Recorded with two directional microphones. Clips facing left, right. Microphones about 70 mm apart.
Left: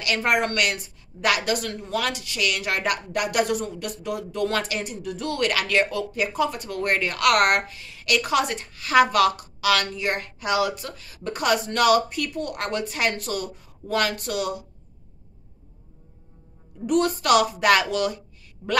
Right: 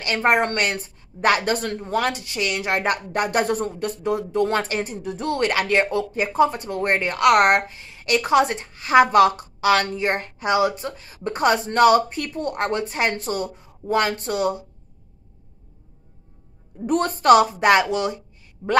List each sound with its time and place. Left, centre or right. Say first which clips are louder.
0.0 s a woman's voice: right 3 dB; right
16.8 s a woman's voice: right 3 dB; right